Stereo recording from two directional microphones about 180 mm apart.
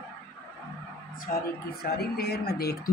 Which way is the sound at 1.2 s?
55° left (ahead or behind).